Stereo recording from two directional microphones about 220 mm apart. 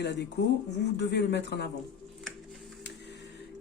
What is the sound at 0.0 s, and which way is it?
A man's voice, 50° left (ahead or behind).